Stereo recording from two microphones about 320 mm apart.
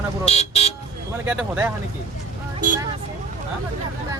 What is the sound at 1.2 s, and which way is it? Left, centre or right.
Speech, centre.